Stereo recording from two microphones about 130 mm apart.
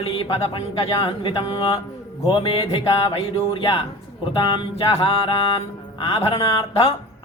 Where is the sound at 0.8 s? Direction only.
45° left (ahead or behind).